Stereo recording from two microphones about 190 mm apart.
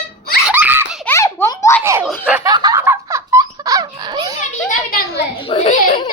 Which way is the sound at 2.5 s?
20° right (ahead or behind).